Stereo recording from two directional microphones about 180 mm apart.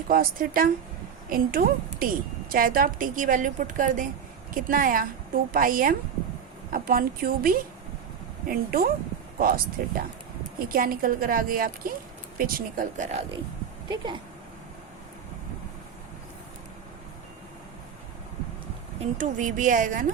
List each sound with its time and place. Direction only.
0.1 s a woman's voice: 55° right (ahead or behind); by 13.4 s 35° right (ahead or behind)
13.8 s speech: 25° right (ahead or behind)
18.9 s a woman's voice: 45° right (ahead or behind)